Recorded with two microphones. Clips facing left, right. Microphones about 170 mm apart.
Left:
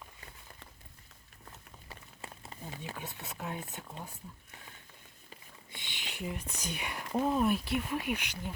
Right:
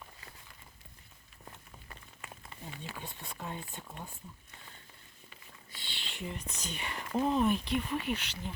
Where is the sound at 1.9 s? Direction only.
30° left (ahead or behind).